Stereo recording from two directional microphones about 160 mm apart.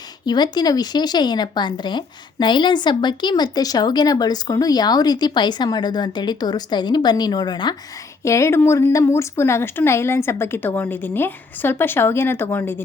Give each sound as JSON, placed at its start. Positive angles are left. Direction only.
{"t": 0.3, "sound": "a woman's voice", "side_deg": 25}